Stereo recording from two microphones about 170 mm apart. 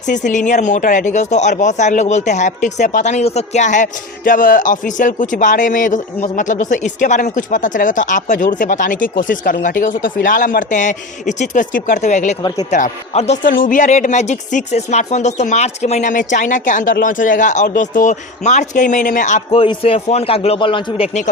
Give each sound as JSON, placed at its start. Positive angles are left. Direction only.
{"t": 0.0, "sound": "speech", "side_deg": 45}
{"t": 12.4, "sound": "speech", "side_deg": 25}
{"t": 12.7, "sound": "speech", "side_deg": 45}
{"t": 19.5, "sound": "a man's voice", "side_deg": 35}